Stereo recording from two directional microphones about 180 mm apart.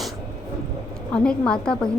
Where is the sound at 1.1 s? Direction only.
5° left (ahead or behind).